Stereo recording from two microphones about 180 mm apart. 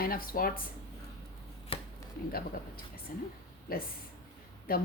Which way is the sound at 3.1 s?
50° left (ahead or behind).